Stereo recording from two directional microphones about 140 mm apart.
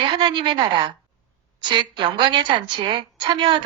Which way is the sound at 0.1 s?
35° right (ahead or behind).